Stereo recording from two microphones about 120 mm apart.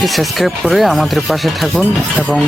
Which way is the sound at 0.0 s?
Centre (ahead or behind).